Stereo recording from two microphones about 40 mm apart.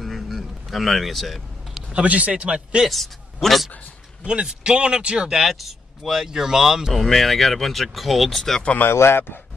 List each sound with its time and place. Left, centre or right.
0.0 s a sound: centre
1.7 s a sound: centre
2.0 s a man's voice: right
2.9 s a man's voice: centre
4.2 s speech: right
5.4 s speech: centre
7.1 s speech: centre
9.0 s a man's voice: left